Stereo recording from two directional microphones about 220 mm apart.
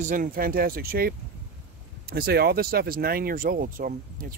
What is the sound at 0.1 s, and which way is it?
Speech, 40° right (ahead or behind).